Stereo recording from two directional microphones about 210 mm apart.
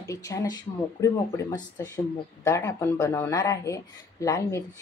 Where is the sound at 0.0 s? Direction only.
15° left (ahead or behind).